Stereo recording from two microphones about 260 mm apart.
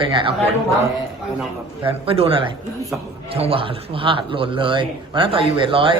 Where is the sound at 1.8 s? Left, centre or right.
Right.